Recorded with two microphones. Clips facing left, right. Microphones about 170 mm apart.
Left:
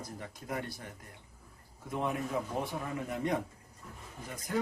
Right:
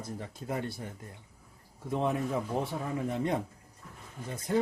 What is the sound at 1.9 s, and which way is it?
Speech, 30° right (ahead or behind).